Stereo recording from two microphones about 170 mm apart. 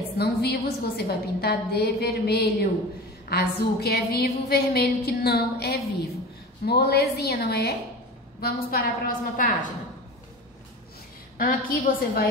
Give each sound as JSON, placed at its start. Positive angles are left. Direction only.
{"t": 0.2, "sound": "a woman's voice", "side_deg": 70}
{"t": 11.3, "sound": "a woman's voice", "side_deg": 55}